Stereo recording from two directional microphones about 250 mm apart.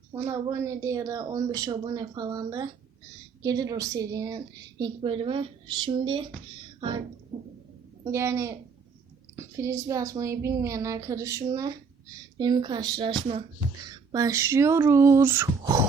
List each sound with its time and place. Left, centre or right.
0.1 s a woman's voice: centre
8.0 s a woman's voice: centre